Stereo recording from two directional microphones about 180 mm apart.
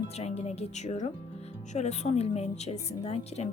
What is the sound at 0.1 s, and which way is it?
A woman's voice, 35° left (ahead or behind).